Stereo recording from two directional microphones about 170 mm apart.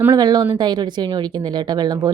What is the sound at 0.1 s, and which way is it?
A woman's voice, 25° right (ahead or behind).